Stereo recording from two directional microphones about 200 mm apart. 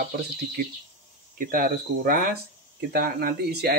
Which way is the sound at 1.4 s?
45° right (ahead or behind).